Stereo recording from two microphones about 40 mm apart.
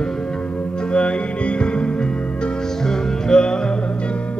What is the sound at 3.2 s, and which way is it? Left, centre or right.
Music, centre.